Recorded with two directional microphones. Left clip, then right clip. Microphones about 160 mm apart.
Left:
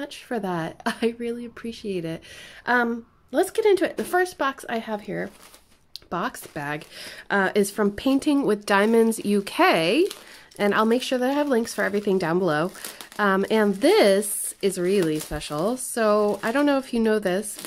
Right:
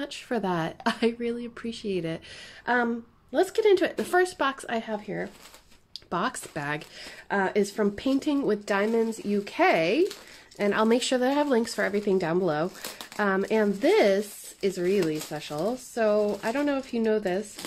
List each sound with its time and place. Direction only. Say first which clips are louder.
0.0 s speech: even; 5° left (ahead or behind)
2.6 s speech: left 4 dB; 20° left (ahead or behind)
6.0 s speech: even; 10° left (ahead or behind)
7.0 s speech: left 6 dB; 25° left (ahead or behind)
11.0 s speech: left 1 dB; 10° left (ahead or behind); by 17.6 s 25° left (ahead or behind)